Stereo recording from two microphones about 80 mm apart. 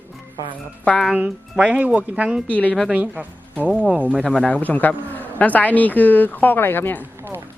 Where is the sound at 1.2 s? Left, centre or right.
Centre.